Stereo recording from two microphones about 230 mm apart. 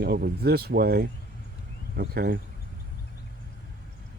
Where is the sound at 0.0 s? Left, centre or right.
Right.